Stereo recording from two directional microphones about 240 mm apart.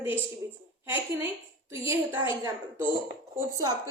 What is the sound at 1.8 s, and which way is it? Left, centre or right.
A woman's voice, centre.